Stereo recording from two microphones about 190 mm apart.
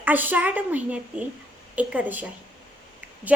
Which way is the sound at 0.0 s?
10° right (ahead or behind).